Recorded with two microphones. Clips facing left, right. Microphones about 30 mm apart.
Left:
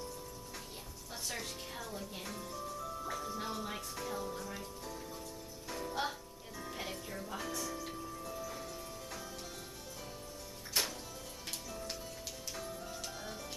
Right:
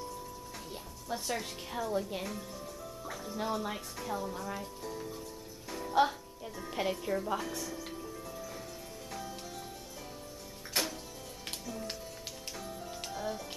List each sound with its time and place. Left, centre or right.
1.1 s speech: centre
3.1 s music: centre
3.3 s speech: centre
4.6 s music: centre
6.7 s speech: centre
7.3 s music: centre
10.8 s music: centre
13.1 s music: centre